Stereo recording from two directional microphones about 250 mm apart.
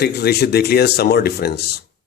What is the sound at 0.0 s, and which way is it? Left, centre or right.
Speech, left.